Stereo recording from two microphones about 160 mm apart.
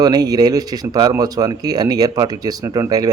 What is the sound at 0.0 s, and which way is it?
Speech, 25° right (ahead or behind).